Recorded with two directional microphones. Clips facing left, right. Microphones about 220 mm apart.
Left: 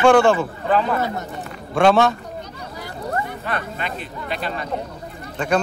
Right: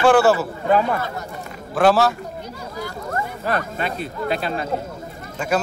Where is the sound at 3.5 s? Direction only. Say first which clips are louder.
Right 3 dB; 40° right (ahead or behind).